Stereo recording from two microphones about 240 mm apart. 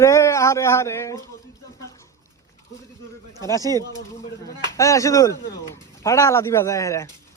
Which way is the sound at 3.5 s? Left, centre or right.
Centre.